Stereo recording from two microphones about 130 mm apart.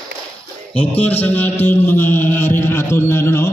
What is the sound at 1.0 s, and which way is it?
Music, 15° left (ahead or behind).